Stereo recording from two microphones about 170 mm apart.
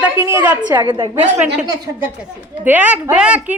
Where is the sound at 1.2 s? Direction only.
10° right (ahead or behind).